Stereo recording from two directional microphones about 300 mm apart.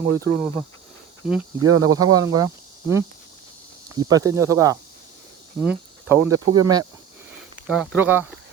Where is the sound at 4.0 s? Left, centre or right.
Centre.